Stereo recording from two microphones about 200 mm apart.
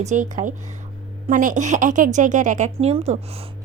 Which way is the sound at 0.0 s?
35° right (ahead or behind).